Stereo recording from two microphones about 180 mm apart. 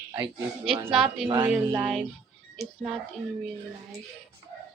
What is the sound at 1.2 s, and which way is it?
Speech, 25° right (ahead or behind).